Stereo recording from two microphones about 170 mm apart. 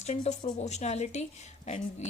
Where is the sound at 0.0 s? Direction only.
45° left (ahead or behind).